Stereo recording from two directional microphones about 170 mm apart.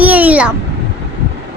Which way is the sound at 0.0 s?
10° right (ahead or behind).